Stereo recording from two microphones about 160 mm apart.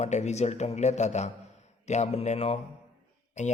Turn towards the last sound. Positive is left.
turn(degrees=45)  # may be behind; listen again after turning